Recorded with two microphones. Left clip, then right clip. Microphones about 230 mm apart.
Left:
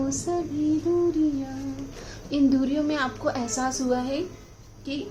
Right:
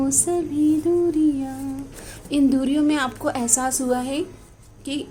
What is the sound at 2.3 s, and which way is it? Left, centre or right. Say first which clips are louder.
A woman's voice: right 3 dB; right.